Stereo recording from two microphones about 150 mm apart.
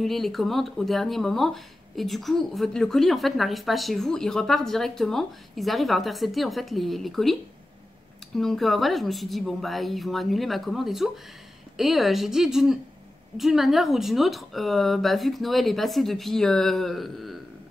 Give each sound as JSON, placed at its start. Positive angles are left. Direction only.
{"t": 0.0, "sound": "speech", "side_deg": 0}
{"t": 8.4, "sound": "speech", "side_deg": 0}